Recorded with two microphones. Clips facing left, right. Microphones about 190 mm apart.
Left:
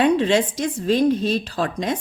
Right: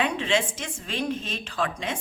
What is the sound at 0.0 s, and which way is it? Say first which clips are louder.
A woman's voice: left 8 dB; 40° left (ahead or behind).